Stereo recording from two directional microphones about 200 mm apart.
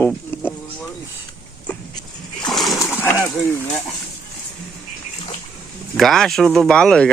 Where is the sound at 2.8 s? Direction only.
10° left (ahead or behind).